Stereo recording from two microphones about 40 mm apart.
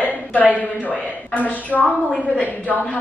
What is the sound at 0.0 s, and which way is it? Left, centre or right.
A woman's voice, left.